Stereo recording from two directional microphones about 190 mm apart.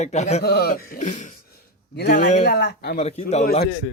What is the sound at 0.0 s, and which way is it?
Speech, 35° left (ahead or behind).